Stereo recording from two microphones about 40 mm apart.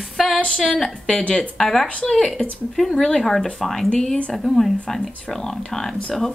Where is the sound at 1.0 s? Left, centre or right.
Left.